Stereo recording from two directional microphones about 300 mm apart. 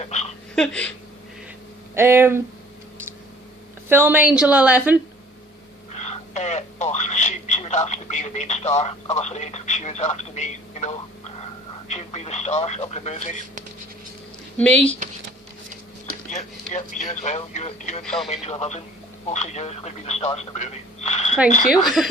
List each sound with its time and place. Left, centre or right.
0.0 s a sound: left
0.5 s a woman's voice: centre
2.0 s speech: centre
3.8 s a woman's voice: centre
6.0 s telephone: left
11.9 s speech: left
14.6 s a woman's voice: centre
16.3 s speech: left
18.0 s a woman's voice: centre
18.3 s speech: left
22.0 s a woman's voice: centre